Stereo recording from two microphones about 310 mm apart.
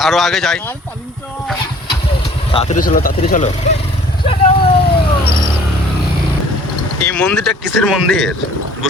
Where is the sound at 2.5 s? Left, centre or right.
Left.